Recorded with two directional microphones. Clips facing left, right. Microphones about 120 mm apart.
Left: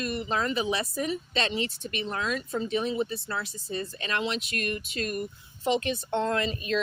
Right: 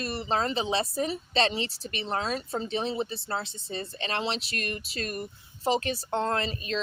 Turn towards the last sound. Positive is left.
turn(degrees=-30)  # may be behind; listen again after turning